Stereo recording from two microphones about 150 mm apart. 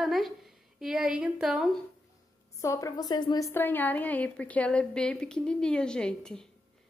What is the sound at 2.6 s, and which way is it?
Speech, 20° left (ahead or behind).